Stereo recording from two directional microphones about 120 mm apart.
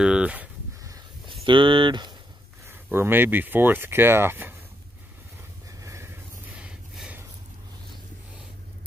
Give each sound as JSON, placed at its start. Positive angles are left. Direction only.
{"t": 0.0, "sound": "speech", "side_deg": -10}
{"t": 1.4, "sound": "speech", "side_deg": -45}
{"t": 2.6, "sound": "speech", "side_deg": -20}
{"t": 5.8, "sound": "vehicle", "side_deg": -25}
{"t": 6.5, "sound": "snort", "side_deg": -10}